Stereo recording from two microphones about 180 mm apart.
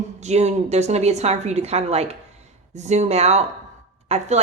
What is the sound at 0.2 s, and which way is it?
Speech, 40° right (ahead or behind).